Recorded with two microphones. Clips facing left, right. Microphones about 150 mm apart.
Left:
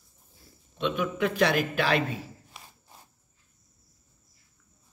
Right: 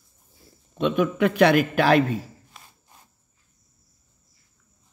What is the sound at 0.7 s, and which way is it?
A man's voice, 50° right (ahead or behind).